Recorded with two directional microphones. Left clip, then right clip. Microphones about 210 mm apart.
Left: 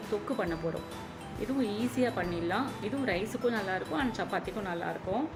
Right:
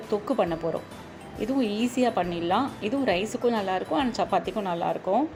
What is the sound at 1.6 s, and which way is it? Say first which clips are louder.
A woman's voice: right 5 dB; 30° right (ahead or behind).